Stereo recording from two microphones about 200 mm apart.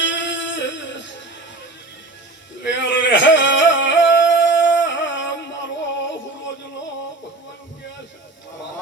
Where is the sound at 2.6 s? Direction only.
65° left (ahead or behind).